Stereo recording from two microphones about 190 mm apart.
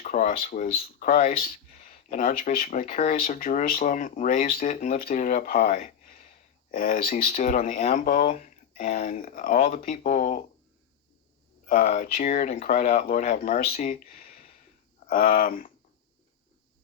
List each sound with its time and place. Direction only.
0.0 s speech: 45° left (ahead or behind)
11.6 s speech: 45° left (ahead or behind)